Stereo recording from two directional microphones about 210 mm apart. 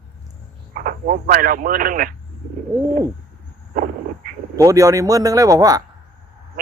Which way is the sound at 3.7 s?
40° right (ahead or behind).